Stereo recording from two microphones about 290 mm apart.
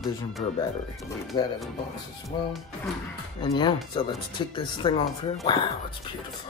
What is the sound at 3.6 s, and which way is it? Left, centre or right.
Speech, centre.